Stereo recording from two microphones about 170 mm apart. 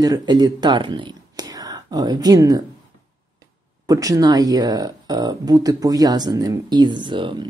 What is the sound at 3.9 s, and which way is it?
Speech, 20° right (ahead or behind).